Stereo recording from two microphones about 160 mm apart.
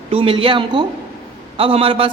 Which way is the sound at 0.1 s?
35° right (ahead or behind).